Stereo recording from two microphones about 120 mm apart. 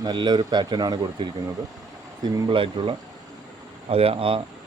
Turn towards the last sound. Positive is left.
turn(degrees=-50)  # may be behind; listen again after turning